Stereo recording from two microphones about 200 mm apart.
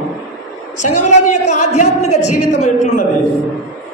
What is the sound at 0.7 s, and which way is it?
A woman's voice, 35° left (ahead or behind).